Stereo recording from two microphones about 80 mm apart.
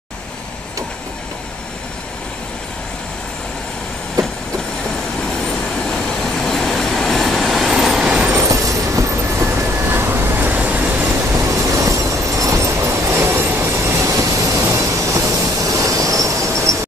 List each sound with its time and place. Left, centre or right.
6.4 s train: centre
8.4 s train: right
11.1 s train: right